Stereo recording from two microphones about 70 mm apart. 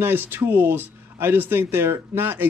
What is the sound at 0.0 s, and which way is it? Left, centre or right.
Speech, right.